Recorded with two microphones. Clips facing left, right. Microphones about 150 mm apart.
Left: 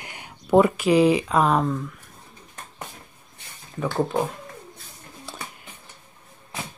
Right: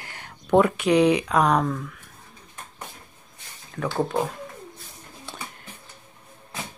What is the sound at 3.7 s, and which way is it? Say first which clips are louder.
Speech: left 1 dB; 5° left (ahead or behind).